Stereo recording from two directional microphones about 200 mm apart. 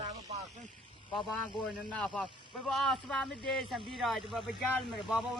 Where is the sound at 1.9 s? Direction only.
5° left (ahead or behind).